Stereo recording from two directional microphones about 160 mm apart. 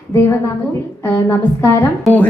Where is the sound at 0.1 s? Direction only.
15° left (ahead or behind).